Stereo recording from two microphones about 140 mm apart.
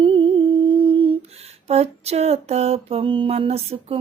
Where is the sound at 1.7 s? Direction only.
50° right (ahead or behind).